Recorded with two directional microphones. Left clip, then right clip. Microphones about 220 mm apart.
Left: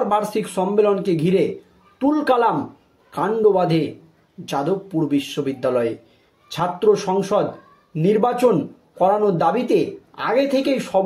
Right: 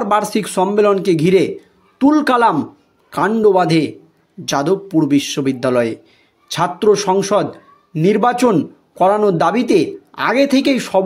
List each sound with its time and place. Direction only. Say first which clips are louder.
0.1 s speech: right 4 dB; 45° right (ahead or behind)